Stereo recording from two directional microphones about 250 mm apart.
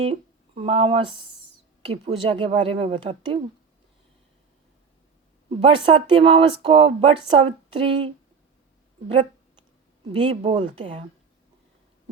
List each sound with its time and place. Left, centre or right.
0.0 s a woman's voice: right
5.5 s a woman's voice: right
10.1 s a woman's voice: right